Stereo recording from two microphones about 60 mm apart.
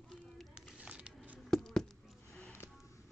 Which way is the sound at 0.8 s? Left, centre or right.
Centre.